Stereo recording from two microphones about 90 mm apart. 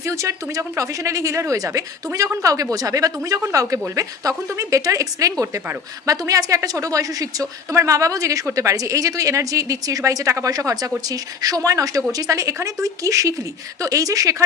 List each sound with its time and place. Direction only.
0.0 s a woman's voice: 35° right (ahead or behind)